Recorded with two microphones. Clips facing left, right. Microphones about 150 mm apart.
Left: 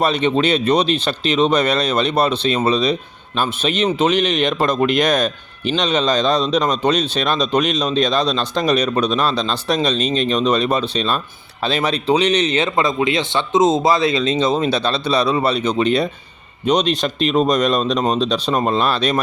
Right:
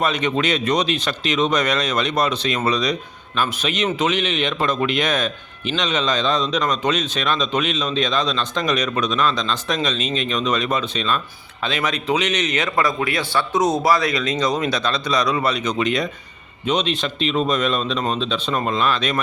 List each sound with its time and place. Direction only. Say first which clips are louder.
0.0 s a man's voice: left 4 dB; 30° left (ahead or behind)